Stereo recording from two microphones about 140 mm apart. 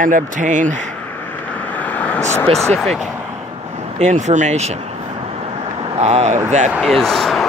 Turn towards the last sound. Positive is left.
turn(degrees=0)  # may be behind; listen again after turning